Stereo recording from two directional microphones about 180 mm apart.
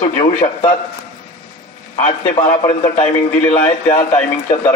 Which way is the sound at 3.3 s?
10° left (ahead or behind).